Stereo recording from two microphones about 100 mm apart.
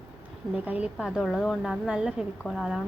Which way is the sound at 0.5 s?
15° right (ahead or behind).